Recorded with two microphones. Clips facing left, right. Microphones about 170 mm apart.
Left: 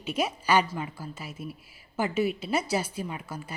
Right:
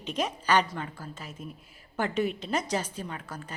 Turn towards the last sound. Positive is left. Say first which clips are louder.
# left 3 dB
turn(degrees=10)  # may be behind; listen again after turning